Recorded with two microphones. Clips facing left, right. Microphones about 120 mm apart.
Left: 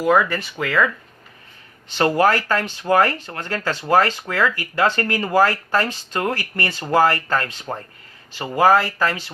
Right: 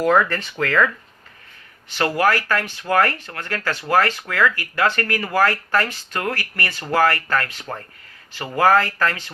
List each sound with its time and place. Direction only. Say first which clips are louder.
0.0 s speech: even; 10° left (ahead or behind)
2.0 s speech: left 2 dB; 20° left (ahead or behind)